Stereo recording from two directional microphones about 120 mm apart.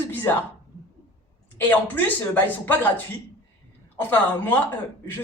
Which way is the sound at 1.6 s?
15° left (ahead or behind).